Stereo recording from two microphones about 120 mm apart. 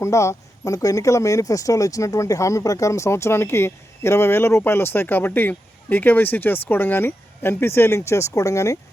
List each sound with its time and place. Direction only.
0.0 s speech: 25° left (ahead or behind)